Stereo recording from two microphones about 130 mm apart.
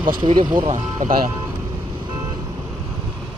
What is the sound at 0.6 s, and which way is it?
Speech, 80° right.